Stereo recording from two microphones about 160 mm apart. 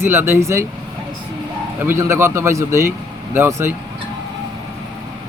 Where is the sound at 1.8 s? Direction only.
15° right (ahead or behind).